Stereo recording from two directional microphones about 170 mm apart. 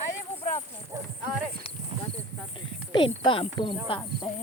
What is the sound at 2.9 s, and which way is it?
Cricket, 30° left (ahead or behind).